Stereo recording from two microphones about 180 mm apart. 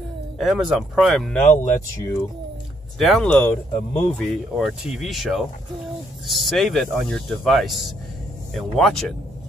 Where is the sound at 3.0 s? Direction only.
5° left (ahead or behind).